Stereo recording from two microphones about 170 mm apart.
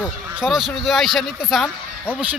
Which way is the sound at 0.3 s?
Centre (ahead or behind).